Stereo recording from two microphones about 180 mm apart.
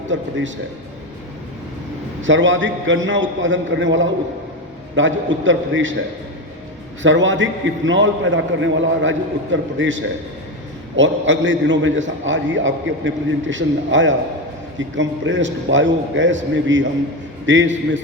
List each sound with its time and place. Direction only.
0.1 s a man's voice: 90° right
2.2 s a man's voice: 90° right
7.0 s a man's voice: 90° right